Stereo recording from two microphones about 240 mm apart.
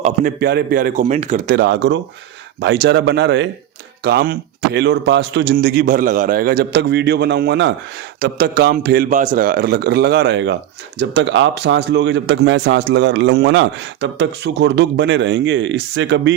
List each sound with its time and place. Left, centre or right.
0.0 s a man's voice: right